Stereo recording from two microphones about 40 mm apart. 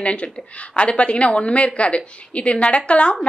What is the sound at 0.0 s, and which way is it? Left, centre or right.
A woman's voice, left.